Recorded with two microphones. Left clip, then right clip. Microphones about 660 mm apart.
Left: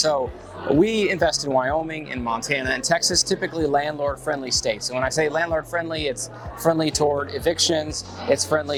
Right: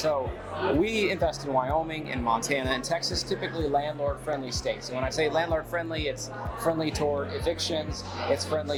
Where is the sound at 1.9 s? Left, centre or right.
Left.